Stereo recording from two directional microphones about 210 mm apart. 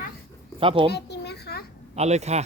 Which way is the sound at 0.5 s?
25° right (ahead or behind).